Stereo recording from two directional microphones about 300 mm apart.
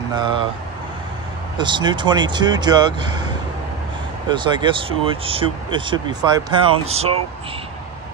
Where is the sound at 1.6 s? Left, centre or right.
Centre.